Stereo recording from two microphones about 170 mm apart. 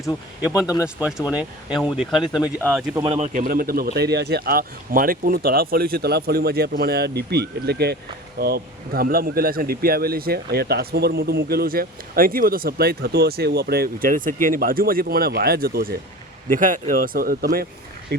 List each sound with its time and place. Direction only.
0.9 s speech: 10° right (ahead or behind)
3.0 s speech: 35° right (ahead or behind)
3.3 s speech: 55° right (ahead or behind)
16.5 s speech: 50° right (ahead or behind); by 18.3 s 70° right (ahead or behind)